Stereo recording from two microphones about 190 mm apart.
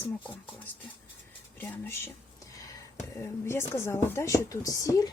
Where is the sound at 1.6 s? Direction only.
10° left (ahead or behind).